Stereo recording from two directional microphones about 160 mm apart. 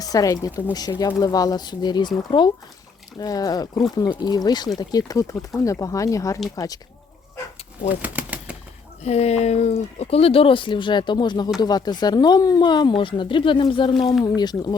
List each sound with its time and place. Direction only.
0.0 s speech: 20° left (ahead or behind)
8.0 s bird flight: 10° right (ahead or behind)
9.0 s speech: 40° left (ahead or behind); by 14.8 s 25° left (ahead or behind)